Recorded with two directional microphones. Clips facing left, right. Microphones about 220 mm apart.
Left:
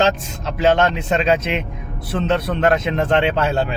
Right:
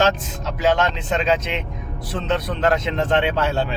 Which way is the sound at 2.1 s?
60° left (ahead or behind).